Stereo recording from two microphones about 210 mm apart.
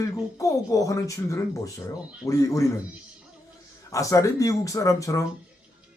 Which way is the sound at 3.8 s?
15° left (ahead or behind).